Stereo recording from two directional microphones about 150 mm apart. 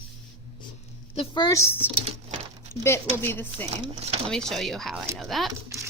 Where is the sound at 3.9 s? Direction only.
45° right (ahead or behind).